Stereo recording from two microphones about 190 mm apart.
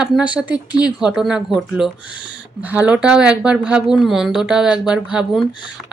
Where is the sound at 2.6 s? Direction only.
10° right (ahead or behind).